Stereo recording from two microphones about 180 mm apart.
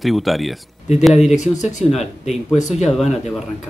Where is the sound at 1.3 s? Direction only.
40° left (ahead or behind).